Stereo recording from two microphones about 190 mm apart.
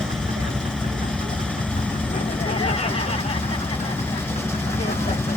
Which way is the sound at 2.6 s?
30° left (ahead or behind).